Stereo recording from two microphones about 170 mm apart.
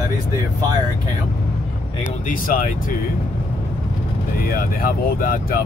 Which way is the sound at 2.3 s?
50° left (ahead or behind).